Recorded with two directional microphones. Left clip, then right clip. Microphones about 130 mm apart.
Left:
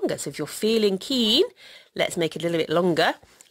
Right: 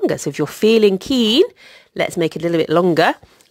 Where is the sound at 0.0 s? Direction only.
35° right (ahead or behind).